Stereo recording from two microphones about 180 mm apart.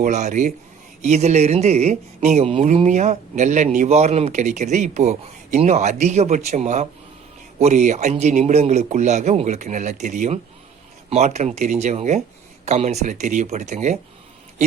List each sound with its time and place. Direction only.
0.0 s speech: 40° right (ahead or behind)